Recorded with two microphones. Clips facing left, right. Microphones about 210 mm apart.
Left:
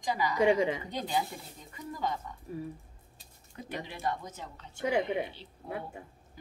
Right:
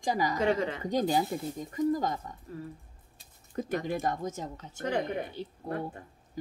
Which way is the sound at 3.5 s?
45° right (ahead or behind).